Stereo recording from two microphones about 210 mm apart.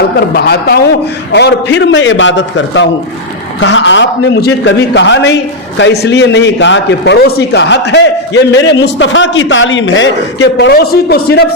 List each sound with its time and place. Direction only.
0.3 s a man's voice: 50° left (ahead or behind)